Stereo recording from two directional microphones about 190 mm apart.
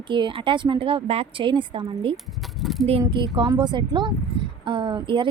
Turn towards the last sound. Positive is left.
turn(degrees=-25)  # may be behind; listen again after turning